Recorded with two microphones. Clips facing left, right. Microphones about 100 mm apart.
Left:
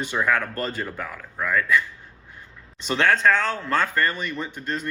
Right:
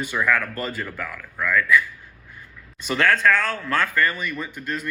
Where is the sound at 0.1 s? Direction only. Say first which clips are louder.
Even; 20° left (ahead or behind).